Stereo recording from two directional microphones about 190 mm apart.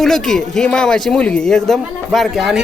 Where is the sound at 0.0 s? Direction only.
Centre (ahead or behind).